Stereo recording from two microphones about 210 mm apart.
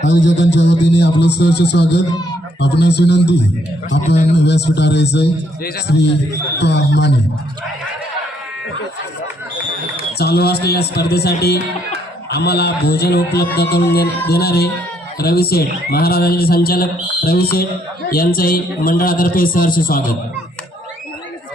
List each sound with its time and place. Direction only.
0.1 s a man's voice: 60° left (ahead or behind)
4.0 s a man's voice: 35° left (ahead or behind)
4.4 s a man's voice: 55° left (ahead or behind)
10.2 s a man's voice: 50° left (ahead or behind)